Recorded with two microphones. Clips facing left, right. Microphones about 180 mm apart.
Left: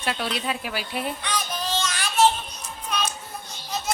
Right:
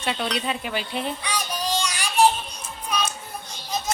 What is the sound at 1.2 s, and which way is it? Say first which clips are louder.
Music: right 1 dB; 10° right (ahead or behind).